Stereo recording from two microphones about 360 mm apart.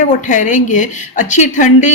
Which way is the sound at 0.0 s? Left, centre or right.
Left.